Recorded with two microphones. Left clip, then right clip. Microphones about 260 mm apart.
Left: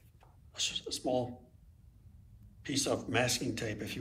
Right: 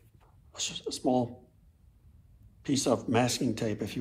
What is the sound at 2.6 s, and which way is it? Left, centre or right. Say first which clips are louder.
Speech: right 5 dB; centre.